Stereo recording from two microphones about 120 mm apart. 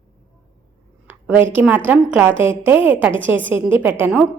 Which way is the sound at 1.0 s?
15° right (ahead or behind).